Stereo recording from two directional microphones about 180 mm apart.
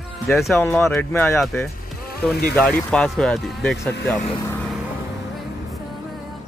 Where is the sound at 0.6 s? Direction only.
15° left (ahead or behind).